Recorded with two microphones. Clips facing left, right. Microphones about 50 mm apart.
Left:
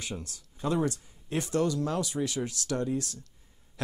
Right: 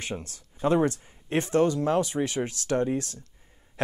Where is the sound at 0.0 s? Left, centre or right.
Right.